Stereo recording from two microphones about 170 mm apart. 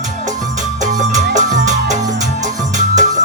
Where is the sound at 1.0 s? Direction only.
45° right (ahead or behind).